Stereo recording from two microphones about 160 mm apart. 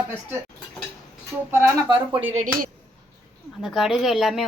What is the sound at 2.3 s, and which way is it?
Speech, 55° right (ahead or behind).